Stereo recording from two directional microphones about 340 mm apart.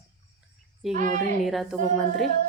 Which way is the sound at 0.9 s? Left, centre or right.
Right.